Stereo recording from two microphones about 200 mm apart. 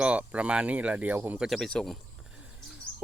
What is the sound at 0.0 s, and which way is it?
Speech, 5° right (ahead or behind).